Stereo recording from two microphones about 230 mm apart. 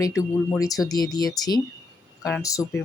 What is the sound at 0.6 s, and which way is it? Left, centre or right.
Speech, centre.